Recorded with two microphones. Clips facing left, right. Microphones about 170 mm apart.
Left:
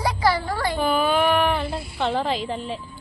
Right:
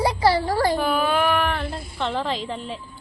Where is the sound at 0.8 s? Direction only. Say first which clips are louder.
Left 1 dB; centre (ahead or behind).